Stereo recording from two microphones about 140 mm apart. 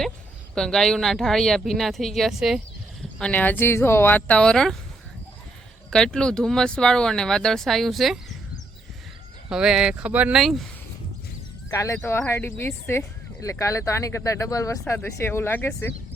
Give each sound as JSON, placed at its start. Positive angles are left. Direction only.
{"t": 0.5, "sound": "speech", "side_deg": 5}
{"t": 5.9, "sound": "speech", "side_deg": 5}
{"t": 9.5, "sound": "speech", "side_deg": -5}
{"t": 11.7, "sound": "speech", "side_deg": 20}